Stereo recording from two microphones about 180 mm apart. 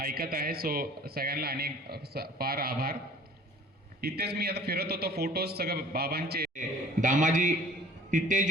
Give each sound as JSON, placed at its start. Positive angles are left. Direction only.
{"t": 0.0, "sound": "a man's voice", "side_deg": -55}
{"t": 4.0, "sound": "a man's voice", "side_deg": -60}